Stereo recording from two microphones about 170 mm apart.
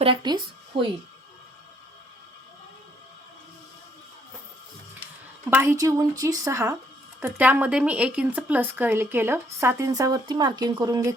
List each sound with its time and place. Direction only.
0.0 s speech: 30° right (ahead or behind)
5.5 s speech: 15° right (ahead or behind)